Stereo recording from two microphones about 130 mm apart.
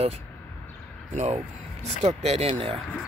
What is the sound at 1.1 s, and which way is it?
Speech, 60° right (ahead or behind).